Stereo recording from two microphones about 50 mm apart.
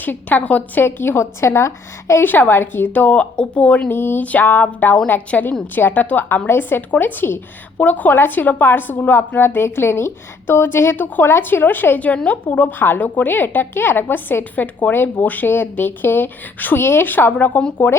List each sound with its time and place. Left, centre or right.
0.0 s a woman's voice: left
0.8 s a woman's voice: left
2.2 s a woman's voice: left
2.9 s speech: left
3.8 s a woman's voice: left
4.2 s a woman's voice: left
7.8 s a woman's voice: left
9.6 s a woman's voice: left
11.9 s speech: left
12.5 s a woman's voice: left